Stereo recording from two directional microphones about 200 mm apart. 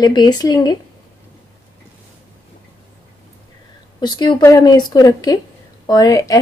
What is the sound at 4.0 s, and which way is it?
Speech, 20° left (ahead or behind).